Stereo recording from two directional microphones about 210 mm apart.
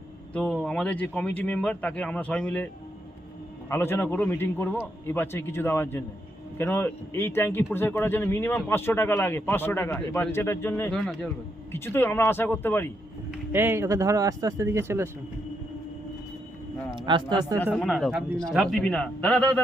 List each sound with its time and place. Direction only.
0.3 s speech: 5° left (ahead or behind)
3.7 s speech: 10° left (ahead or behind)
13.5 s speech: 10° right (ahead or behind)
16.9 s a man's voice: 20° right (ahead or behind)
17.7 s speech: centre (ahead or behind)